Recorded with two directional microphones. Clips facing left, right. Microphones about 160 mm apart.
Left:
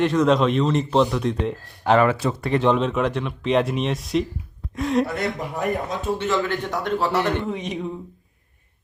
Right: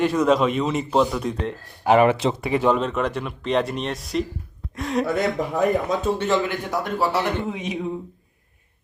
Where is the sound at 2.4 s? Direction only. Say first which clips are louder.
Left 2 dB; 5° right (ahead or behind).